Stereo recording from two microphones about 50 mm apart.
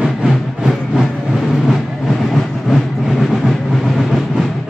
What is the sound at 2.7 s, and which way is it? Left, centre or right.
Train, centre.